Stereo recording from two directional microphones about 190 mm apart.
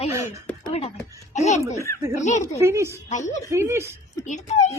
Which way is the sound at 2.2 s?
40° left (ahead or behind).